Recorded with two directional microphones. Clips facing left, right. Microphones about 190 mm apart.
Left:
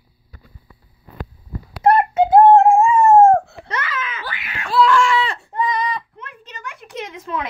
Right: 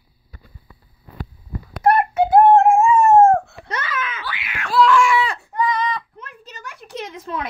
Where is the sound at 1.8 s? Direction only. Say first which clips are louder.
Left 2 dB; 20° left (ahead or behind).